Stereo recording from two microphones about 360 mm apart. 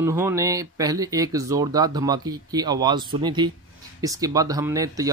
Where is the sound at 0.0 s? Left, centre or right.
Centre.